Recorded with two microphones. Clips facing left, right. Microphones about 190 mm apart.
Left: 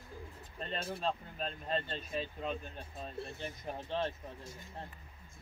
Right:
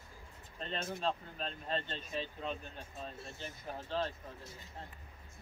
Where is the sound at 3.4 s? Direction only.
25° left (ahead or behind).